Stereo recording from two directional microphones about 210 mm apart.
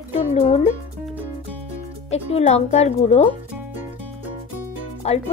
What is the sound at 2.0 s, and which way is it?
Speech, 30° left (ahead or behind).